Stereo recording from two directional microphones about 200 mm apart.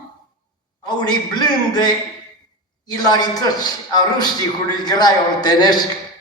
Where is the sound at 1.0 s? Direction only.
20° left (ahead or behind).